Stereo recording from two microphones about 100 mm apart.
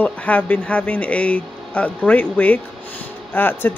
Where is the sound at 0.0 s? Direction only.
15° left (ahead or behind).